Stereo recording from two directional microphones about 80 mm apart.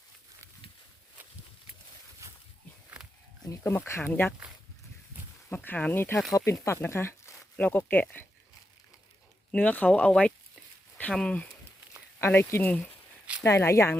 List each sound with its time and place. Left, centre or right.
3.5 s speech: left
5.5 s speech: left
7.5 s speech: left
9.5 s speech: centre
12.2 s speech: left
13.4 s speech: left